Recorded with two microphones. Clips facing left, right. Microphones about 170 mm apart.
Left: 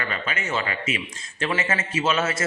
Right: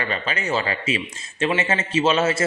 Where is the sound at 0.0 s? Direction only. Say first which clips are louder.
Right 3 dB; 30° right (ahead or behind).